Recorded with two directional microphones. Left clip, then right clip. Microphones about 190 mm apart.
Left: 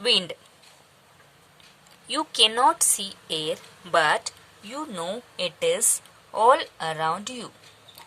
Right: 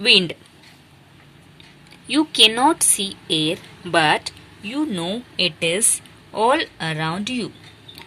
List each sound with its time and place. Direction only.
0.0 s speech: 30° left (ahead or behind)
2.0 s a woman's voice: 30° left (ahead or behind)